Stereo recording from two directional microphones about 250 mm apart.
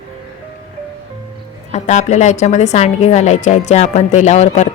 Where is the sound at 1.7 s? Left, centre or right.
Left.